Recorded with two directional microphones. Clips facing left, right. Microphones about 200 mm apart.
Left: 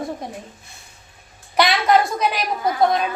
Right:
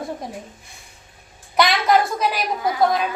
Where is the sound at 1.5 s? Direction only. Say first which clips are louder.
Left 1 dB; centre (ahead or behind).